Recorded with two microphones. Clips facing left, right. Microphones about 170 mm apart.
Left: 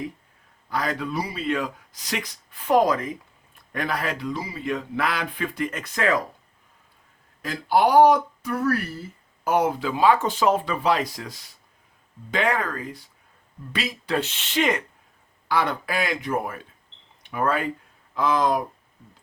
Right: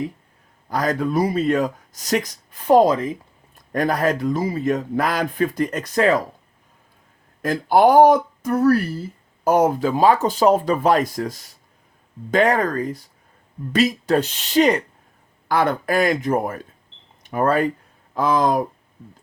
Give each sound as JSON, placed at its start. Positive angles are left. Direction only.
{"t": 0.7, "sound": "speech", "side_deg": -45}
{"t": 2.7, "sound": "speech", "side_deg": -30}
{"t": 3.7, "sound": "speech", "side_deg": -45}
{"t": 7.4, "sound": "speech", "side_deg": -50}
{"t": 15.4, "sound": "speech", "side_deg": -45}